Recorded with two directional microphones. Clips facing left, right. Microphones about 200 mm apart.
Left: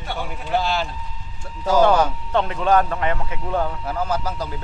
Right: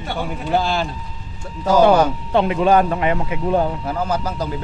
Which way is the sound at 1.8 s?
10° right (ahead or behind).